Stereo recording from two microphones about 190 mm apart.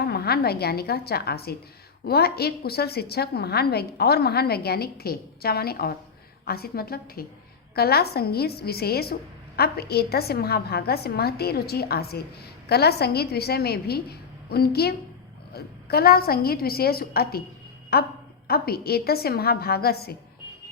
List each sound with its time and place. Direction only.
0.0 s a woman's voice: 55° left (ahead or behind)